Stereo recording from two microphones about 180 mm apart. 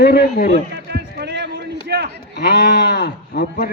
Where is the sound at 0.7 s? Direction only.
65° right (ahead or behind).